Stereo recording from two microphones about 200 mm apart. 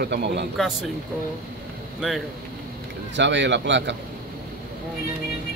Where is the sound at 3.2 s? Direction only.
65° right (ahead or behind).